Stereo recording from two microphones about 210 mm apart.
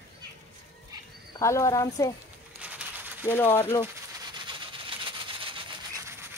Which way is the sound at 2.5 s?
5° right (ahead or behind).